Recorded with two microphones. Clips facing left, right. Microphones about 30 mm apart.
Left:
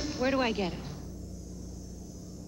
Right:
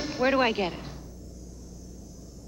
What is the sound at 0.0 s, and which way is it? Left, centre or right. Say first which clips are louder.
Speech: right 5 dB; right.